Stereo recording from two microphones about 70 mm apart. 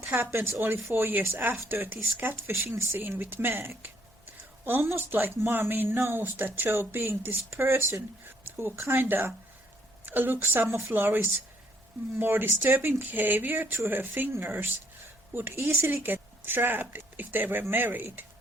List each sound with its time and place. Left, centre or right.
0.0 s speech: right